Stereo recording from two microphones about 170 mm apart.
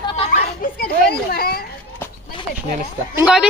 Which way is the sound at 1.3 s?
60° left (ahead or behind).